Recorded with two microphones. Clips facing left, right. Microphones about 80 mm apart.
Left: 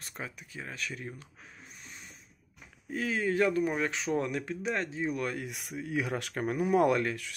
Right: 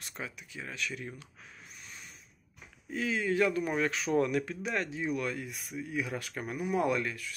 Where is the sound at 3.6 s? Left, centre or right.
Centre; by 5.4 s left.